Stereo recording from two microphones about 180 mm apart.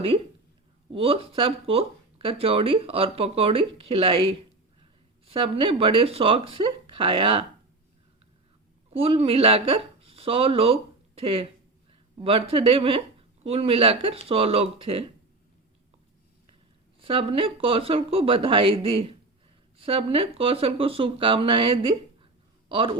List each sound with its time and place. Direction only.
0.9 s speech: 30° right (ahead or behind)
8.9 s speech: 35° right (ahead or behind)
17.0 s a man's voice: 30° right (ahead or behind)